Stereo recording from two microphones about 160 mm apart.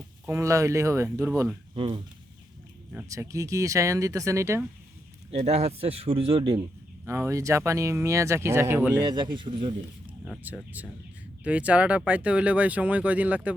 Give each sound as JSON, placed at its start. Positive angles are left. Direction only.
{"t": 0.3, "sound": "speech", "side_deg": -15}
{"t": 1.7, "sound": "speech", "side_deg": -35}
{"t": 3.1, "sound": "speech", "side_deg": -20}
{"t": 5.3, "sound": "a man's voice", "side_deg": -40}
{"t": 7.0, "sound": "speech", "side_deg": -15}
{"t": 9.0, "sound": "speech", "side_deg": -30}
{"t": 10.2, "sound": "speech", "side_deg": -5}